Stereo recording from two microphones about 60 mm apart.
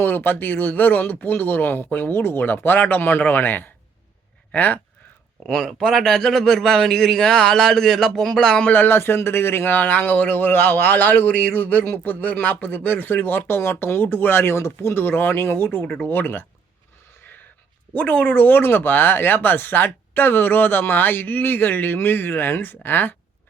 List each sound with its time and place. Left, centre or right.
0.0 s speech: left
5.5 s a man's voice: centre
8.6 s speech: left
18.1 s speech: left
18.3 s speech: left